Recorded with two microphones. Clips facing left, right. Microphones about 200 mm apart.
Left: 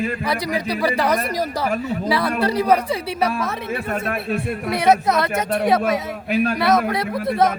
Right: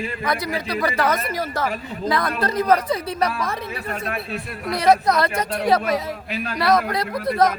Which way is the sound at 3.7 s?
50° left (ahead or behind).